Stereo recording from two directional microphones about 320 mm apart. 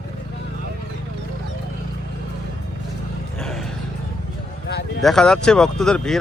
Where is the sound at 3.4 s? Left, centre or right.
Centre.